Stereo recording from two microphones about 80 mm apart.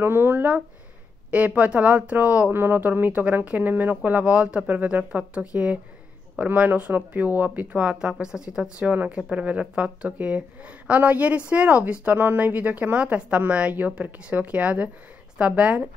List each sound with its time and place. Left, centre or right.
0.0 s a woman's voice: right